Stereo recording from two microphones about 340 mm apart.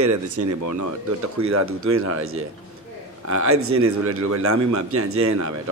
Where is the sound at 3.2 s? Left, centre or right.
Right.